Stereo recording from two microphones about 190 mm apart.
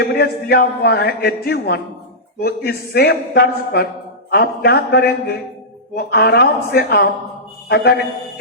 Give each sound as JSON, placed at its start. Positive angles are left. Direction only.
{"t": 0.0, "sound": "speech", "side_deg": 55}